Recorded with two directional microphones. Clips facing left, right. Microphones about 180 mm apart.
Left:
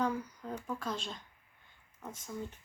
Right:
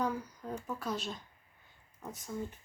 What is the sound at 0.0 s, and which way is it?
Speech, 5° right (ahead or behind).